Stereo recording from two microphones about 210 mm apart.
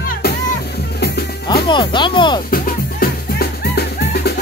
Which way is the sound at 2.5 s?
45° left (ahead or behind).